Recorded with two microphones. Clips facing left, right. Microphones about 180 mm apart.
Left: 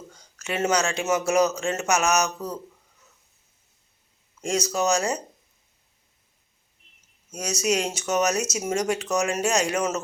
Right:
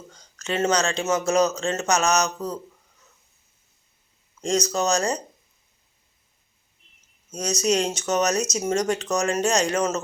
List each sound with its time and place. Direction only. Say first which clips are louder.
0.1 s a man's voice: right 3 dB; 10° left (ahead or behind)
4.4 s a sound: right 3 dB; 10° left (ahead or behind)
4.7 s a man's voice: even; 10° left (ahead or behind)
7.3 s a man's voice: right 2 dB; 5° left (ahead or behind)